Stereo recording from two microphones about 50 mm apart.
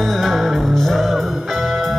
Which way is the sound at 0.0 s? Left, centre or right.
Centre.